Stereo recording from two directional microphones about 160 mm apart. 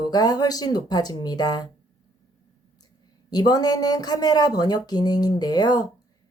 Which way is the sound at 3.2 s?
25° left (ahead or behind).